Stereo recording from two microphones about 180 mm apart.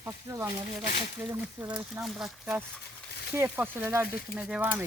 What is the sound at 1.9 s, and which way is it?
Speech, 10° right (ahead or behind).